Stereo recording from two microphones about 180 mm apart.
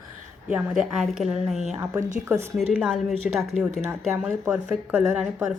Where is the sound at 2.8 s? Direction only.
Centre (ahead or behind).